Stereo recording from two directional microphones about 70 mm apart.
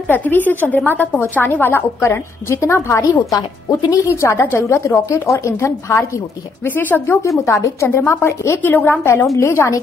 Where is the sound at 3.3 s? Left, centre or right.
Left.